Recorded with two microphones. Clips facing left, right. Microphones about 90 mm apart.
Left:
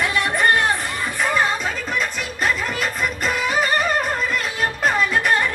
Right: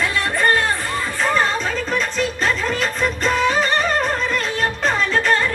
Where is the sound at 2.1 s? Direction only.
10° left (ahead or behind).